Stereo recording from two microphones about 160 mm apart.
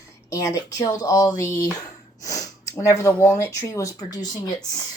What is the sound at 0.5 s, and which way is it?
Speech, 20° left (ahead or behind).